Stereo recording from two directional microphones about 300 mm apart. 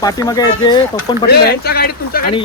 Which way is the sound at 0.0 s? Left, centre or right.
Centre.